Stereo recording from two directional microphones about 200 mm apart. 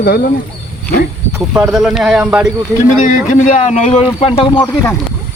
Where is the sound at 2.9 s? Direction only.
40° left (ahead or behind).